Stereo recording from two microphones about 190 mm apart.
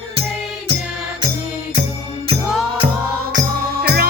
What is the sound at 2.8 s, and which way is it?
Music, 55° right (ahead or behind).